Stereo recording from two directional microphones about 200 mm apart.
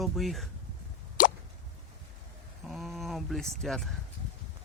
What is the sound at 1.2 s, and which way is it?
Plop, 45° left (ahead or behind).